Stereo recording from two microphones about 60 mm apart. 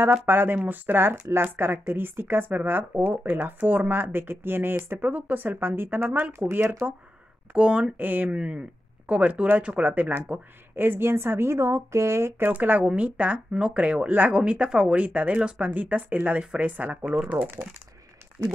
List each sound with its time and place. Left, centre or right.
0.3 s speech: right
7.5 s speech: centre; by 12.4 s right
12.4 s speech: right